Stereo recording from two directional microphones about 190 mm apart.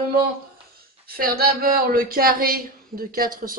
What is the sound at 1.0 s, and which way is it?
Speech, 50° right (ahead or behind).